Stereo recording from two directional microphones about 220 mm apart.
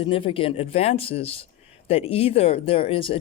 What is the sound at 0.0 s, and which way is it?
Speech, 25° left (ahead or behind).